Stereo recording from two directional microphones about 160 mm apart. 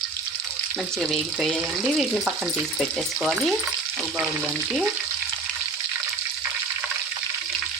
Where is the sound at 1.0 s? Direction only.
Centre (ahead or behind).